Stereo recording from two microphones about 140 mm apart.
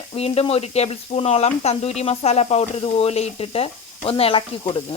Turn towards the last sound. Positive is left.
turn(degrees=40)  # may be behind; listen again after turning